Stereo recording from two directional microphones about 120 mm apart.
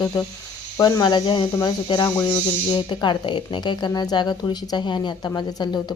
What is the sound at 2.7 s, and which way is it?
Speech, 40° left (ahead or behind).